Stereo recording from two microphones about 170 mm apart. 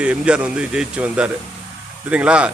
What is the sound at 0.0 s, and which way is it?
Speech, 5° right (ahead or behind).